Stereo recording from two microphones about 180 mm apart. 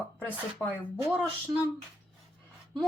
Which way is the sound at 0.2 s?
5° left (ahead or behind).